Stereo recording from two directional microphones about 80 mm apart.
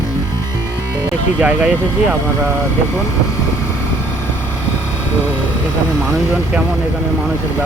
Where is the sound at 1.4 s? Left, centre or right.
Centre.